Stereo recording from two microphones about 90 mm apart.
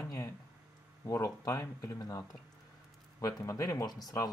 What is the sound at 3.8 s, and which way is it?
Speech, 50° left (ahead or behind).